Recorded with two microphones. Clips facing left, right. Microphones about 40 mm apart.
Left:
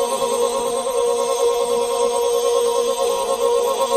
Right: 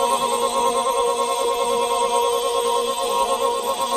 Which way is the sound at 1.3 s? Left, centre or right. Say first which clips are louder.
Left 3 dB; right.